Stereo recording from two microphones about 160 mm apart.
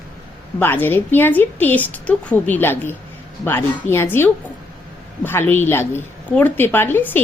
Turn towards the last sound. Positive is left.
turn(degrees=15)  # may be behind; listen again after turning